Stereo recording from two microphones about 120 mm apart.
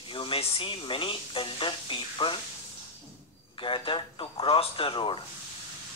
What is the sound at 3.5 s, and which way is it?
Speech, 45° left (ahead or behind).